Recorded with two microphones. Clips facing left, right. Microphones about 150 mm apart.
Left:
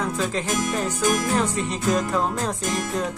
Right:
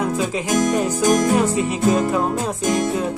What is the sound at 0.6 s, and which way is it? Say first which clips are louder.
Music: right 10 dB; 45° right (ahead or behind).